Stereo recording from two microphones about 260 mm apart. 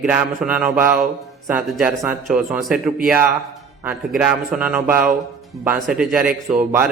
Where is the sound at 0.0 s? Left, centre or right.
Centre.